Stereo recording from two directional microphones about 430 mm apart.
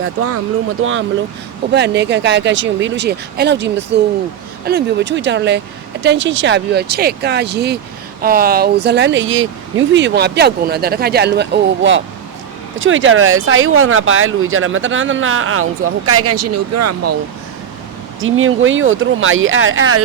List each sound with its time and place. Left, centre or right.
0.0 s speech: right
18.2 s speech: right